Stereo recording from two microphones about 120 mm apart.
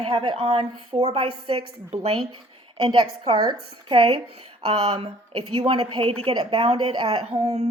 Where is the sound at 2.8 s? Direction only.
40° right (ahead or behind).